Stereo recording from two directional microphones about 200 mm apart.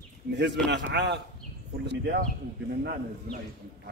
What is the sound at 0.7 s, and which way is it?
Speech, 60° right (ahead or behind).